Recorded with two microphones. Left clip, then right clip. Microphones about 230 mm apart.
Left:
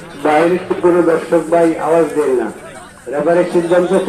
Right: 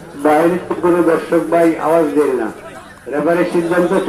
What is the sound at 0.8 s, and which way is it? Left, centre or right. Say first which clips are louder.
A man's voice: left 1 dB; right.